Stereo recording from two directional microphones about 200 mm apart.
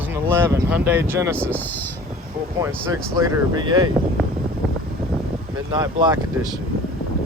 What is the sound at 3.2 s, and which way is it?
Speech, 20° right (ahead or behind).